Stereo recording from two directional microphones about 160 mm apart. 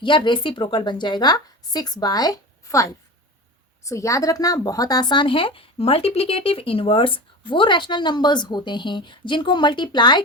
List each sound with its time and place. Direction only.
0.0 s speech: 30° left (ahead or behind)